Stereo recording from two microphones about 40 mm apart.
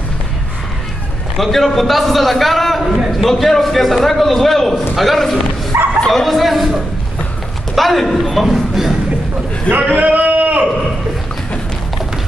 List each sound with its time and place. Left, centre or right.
1.3 s a man's voice: centre
5.7 s speech: right
6.2 s a man's voice: centre
9.9 s a sound: right